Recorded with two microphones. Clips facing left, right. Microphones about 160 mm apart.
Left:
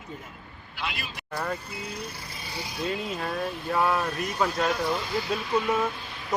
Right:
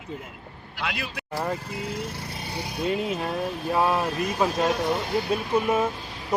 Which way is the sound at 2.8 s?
20° right (ahead or behind).